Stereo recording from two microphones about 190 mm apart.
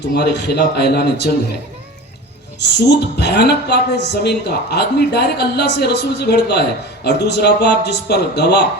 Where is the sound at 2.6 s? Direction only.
60° left (ahead or behind).